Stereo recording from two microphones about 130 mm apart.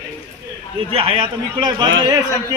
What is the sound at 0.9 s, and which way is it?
A man's voice, 45° right (ahead or behind).